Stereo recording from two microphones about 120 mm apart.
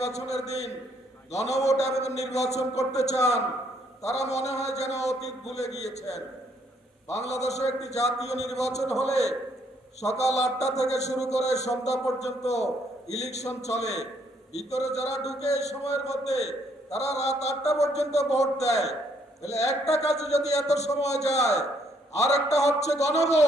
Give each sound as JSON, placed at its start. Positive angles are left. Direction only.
{"t": 0.0, "sound": "a man's voice", "side_deg": 65}